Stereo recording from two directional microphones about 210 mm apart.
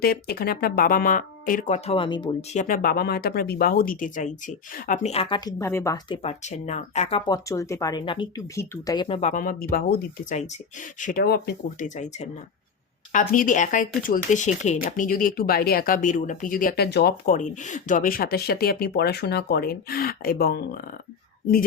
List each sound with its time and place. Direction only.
0.0 s speech: 45° left (ahead or behind); by 2.6 s 20° left (ahead or behind)
2.6 s speech: 40° left (ahead or behind); by 5.5 s 25° left (ahead or behind)
5.5 s speech: 15° left (ahead or behind)
6.2 s speech: 35° left (ahead or behind)
7.3 s speech: 15° left (ahead or behind)
9.3 s speech: 40° left (ahead or behind)
11.9 s speech: 35° left (ahead or behind)